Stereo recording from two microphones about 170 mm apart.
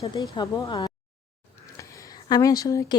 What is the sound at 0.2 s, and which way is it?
Speech, 20° left (ahead or behind).